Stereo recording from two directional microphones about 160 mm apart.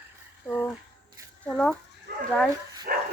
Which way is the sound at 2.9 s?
60° right (ahead or behind).